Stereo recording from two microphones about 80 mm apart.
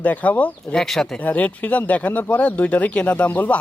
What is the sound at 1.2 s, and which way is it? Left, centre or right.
Speech, centre.